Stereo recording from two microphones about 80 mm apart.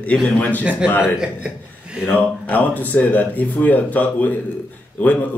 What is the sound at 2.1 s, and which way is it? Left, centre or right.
A man's voice, left.